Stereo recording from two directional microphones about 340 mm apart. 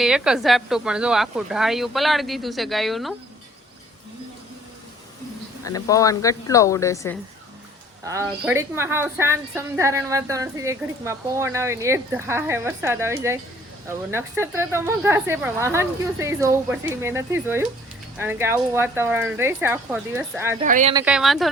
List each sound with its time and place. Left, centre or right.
0.0 s speech: centre
5.6 s a woman's voice: centre
8.0 s a woman's voice: centre
20.6 s speech: right
20.9 s speech: centre